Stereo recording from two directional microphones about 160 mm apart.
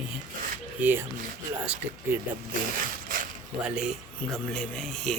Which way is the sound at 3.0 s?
60° right (ahead or behind).